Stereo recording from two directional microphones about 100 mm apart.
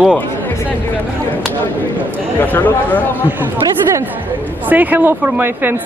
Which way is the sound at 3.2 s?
20° right (ahead or behind).